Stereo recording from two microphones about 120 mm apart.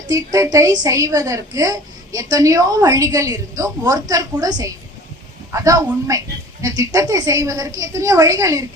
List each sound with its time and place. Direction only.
0.1 s a woman's voice: 30° right (ahead or behind)